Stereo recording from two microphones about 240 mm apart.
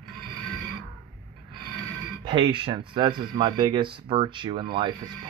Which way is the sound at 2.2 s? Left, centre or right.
Right.